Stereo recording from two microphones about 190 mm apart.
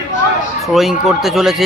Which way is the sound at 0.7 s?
Centre (ahead or behind).